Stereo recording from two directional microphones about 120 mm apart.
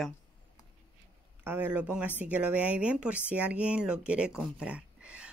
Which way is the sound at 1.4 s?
15° right (ahead or behind).